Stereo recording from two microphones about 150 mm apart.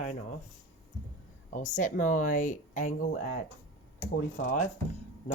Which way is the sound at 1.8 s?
60° left (ahead or behind).